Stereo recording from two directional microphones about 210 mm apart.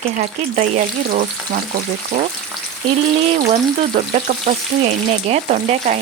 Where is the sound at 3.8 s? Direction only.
35° right (ahead or behind).